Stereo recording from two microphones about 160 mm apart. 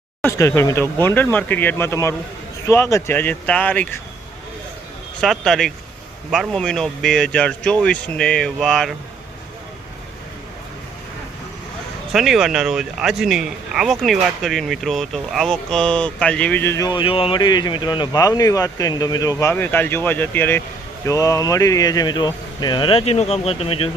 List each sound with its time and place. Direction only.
0.2 s speech: 15° left (ahead or behind)
5.2 s speech: centre (ahead or behind)
12.1 s speech: centre (ahead or behind); by 23.9 s 35° left (ahead or behind)